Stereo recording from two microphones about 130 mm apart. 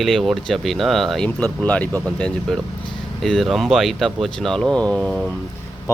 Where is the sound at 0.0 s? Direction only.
Centre (ahead or behind).